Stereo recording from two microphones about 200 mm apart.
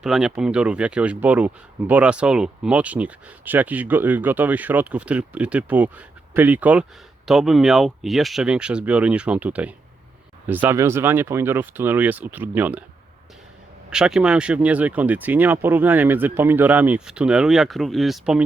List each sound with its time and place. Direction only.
0.0 s speech: centre (ahead or behind)
13.9 s speech: 5° right (ahead or behind)